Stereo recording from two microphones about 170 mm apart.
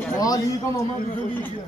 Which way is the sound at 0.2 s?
20° left (ahead or behind).